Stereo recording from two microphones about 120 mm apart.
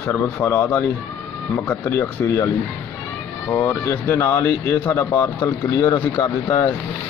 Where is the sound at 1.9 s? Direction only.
20° left (ahead or behind).